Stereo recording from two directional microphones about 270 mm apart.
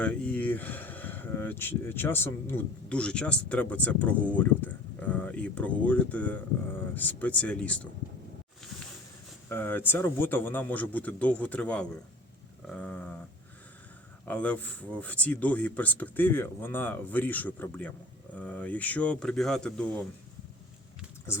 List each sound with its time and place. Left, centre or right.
0.0 s speech: centre
9.5 s a man's voice: centre
14.3 s speech: centre